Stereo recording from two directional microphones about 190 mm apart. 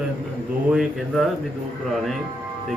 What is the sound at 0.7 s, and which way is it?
Speech, centre (ahead or behind).